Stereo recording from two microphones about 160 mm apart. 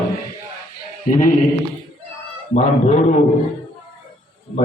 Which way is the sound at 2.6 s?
45° left (ahead or behind).